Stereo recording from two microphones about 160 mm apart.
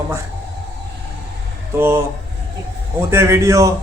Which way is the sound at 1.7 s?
15° right (ahead or behind).